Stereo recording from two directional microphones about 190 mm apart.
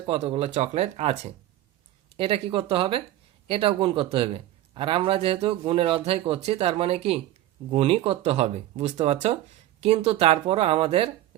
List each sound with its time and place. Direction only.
0.0 s speech: 30° right (ahead or behind)